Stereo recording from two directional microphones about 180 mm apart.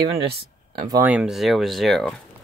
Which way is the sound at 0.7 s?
20° right (ahead or behind).